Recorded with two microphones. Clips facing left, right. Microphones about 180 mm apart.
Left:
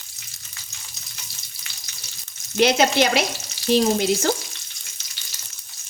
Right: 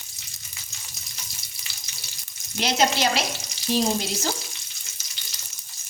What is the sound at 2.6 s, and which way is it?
Speech, 60° left (ahead or behind).